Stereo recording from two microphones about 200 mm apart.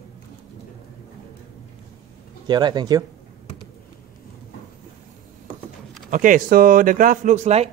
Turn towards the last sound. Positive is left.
turn(degrees=-35)  # may be behind; listen again after turning